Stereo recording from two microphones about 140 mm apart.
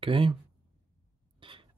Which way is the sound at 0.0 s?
40° right (ahead or behind).